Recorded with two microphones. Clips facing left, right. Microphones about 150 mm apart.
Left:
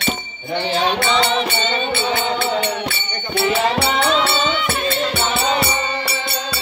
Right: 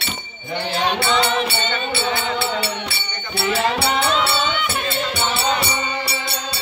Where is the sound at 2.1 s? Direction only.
45° left (ahead or behind).